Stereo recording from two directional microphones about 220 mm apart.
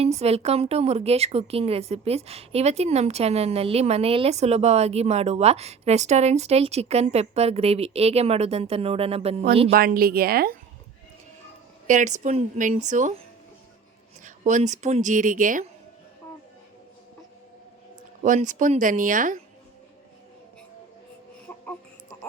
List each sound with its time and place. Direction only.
0.2 s a woman's voice: 30° right (ahead or behind)
9.7 s speech: 40° right (ahead or behind)
11.9 s speech: 35° right (ahead or behind)
14.3 s speech: 35° right (ahead or behind)
18.2 s speech: 35° right (ahead or behind)